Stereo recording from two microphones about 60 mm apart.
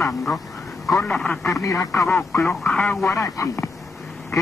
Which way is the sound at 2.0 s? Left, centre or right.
Left.